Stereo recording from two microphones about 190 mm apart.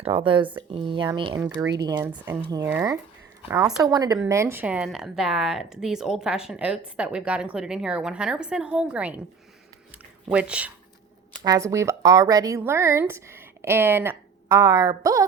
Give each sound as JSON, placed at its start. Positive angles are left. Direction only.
{"t": 0.0, "sound": "a woman's voice", "side_deg": -25}
{"t": 9.9, "sound": "a sound", "side_deg": -5}
{"t": 11.4, "sound": "speech", "side_deg": -15}